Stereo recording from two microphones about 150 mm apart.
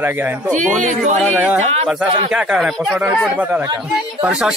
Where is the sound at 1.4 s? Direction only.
10° right (ahead or behind).